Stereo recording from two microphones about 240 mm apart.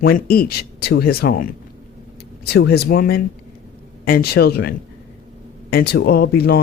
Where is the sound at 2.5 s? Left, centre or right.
Left.